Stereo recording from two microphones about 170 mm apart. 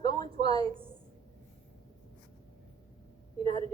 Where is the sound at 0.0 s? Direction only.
25° left (ahead or behind).